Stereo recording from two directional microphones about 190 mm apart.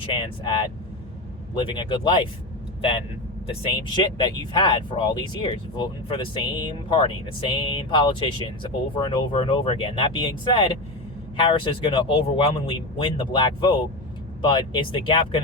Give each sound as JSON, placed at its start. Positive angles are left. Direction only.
{"t": 0.0, "sound": "speech", "side_deg": 25}
{"t": 3.6, "sound": "speech", "side_deg": 25}